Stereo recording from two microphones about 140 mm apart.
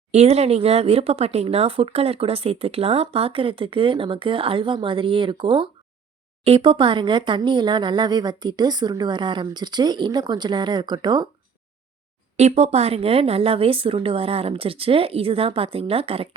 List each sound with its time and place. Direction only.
0.1 s speech: 50° right (ahead or behind); by 11.3 s 30° right (ahead or behind)
12.4 s speech: 50° right (ahead or behind)